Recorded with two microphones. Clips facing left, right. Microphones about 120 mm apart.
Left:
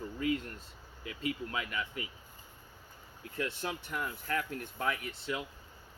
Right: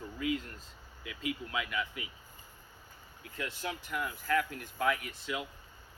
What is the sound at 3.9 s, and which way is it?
A man's voice, 35° left (ahead or behind).